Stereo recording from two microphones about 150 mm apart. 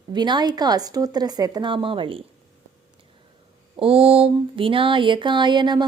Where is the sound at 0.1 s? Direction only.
30° right (ahead or behind).